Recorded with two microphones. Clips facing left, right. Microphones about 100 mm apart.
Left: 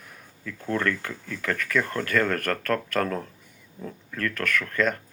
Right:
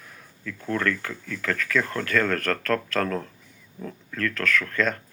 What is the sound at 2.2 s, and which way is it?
Speech, 15° left (ahead or behind).